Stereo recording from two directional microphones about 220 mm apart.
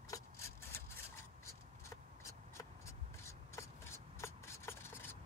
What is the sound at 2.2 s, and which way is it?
Rub, 15° left (ahead or behind).